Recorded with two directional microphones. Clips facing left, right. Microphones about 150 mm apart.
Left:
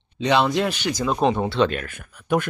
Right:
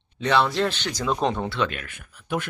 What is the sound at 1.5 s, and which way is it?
Speech, 30° left (ahead or behind).